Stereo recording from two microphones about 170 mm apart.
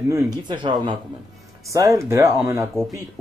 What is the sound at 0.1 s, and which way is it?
Speech, 20° right (ahead or behind).